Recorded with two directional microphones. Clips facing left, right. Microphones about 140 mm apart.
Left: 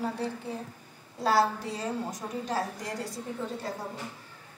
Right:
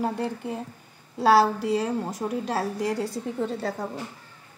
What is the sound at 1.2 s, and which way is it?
A woman's voice, 75° right (ahead or behind).